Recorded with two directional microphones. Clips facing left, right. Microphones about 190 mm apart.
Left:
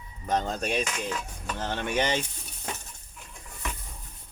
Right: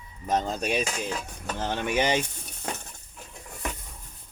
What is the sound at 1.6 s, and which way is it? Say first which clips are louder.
Speech: right 2 dB; 15° right (ahead or behind).